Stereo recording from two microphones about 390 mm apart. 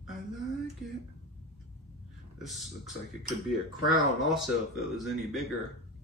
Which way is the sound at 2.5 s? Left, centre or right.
Centre.